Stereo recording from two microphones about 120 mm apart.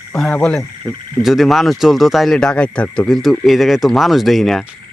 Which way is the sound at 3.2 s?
Centre (ahead or behind).